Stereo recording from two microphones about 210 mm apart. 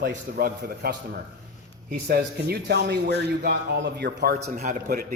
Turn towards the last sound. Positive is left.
turn(degrees=-40)  # may be behind; listen again after turning